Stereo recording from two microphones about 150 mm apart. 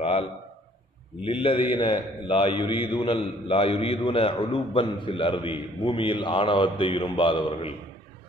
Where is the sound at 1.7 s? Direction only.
35° left (ahead or behind).